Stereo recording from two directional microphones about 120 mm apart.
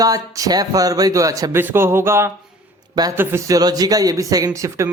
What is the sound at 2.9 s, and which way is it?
A man's voice, 35° right (ahead or behind).